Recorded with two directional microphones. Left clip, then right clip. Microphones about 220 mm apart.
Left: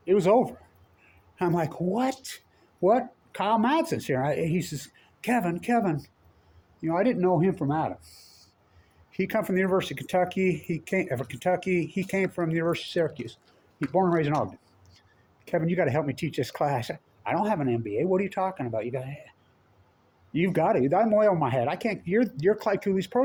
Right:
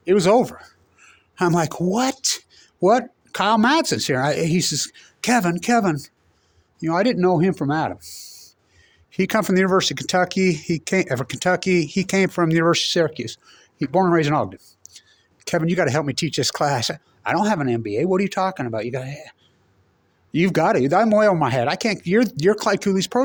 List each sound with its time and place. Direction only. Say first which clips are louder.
0.0 s speech: right 5 dB; 60° right (ahead or behind)